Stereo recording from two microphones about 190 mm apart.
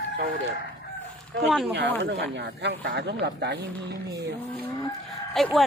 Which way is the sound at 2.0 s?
65° right (ahead or behind).